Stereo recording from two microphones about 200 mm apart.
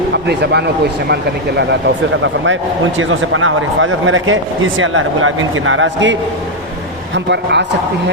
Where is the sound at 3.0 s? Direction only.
85° right.